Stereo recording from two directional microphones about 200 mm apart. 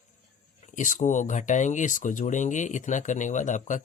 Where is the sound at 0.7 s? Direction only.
40° left (ahead or behind).